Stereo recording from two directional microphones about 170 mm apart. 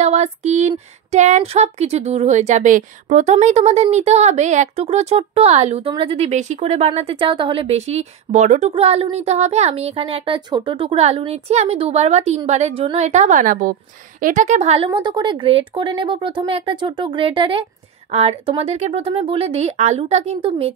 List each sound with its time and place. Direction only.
0.0 s a woman's voice: 40° right (ahead or behind)
14.9 s speech: 25° right (ahead or behind)